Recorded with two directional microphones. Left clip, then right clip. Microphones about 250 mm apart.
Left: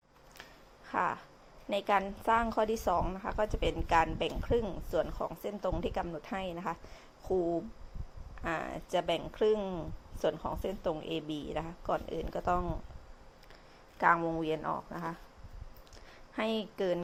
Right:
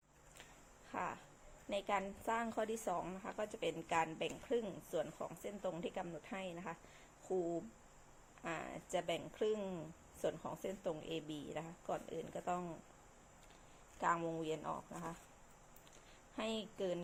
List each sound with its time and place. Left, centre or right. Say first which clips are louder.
0.9 s a woman's voice: left 11 dB; left
14.0 s a woman's voice: left 10 dB; left
16.3 s a woman's voice: left 9 dB; left